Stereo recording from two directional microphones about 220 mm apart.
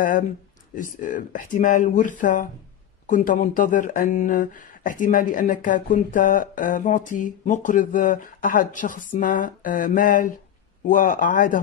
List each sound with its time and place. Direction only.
0.7 s speech: 35° left (ahead or behind)